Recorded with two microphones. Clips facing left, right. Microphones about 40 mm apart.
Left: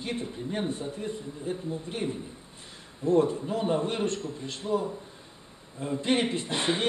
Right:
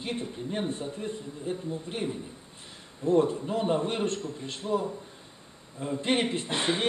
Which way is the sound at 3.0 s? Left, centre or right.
Centre.